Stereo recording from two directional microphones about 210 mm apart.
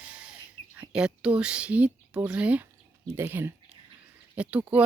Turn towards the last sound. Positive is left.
turn(degrees=-5)  # may be behind; listen again after turning